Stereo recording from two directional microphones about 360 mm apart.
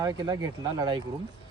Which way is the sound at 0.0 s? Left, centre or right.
Centre.